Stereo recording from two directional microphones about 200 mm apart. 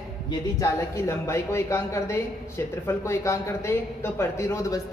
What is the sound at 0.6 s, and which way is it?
A woman's voice, 15° left (ahead or behind).